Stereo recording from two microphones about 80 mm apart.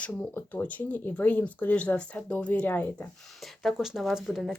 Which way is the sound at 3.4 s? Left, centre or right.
Centre.